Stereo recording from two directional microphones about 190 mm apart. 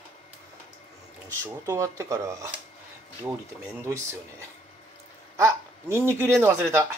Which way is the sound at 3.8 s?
15° right (ahead or behind).